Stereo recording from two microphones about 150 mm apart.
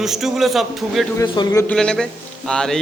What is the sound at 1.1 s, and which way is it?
Speech, 30° left (ahead or behind).